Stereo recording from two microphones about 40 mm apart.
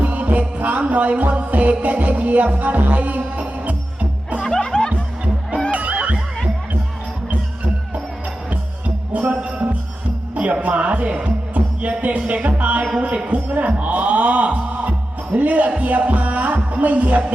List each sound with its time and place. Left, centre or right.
0.0 s music: right
4.4 s music: centre
5.7 s music: right
9.1 s music: right
10.3 s speech: right
11.5 s music: right
13.5 s speech: right
15.8 s music: right